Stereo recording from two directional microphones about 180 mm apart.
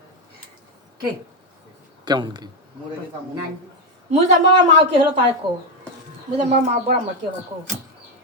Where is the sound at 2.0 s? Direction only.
25° right (ahead or behind).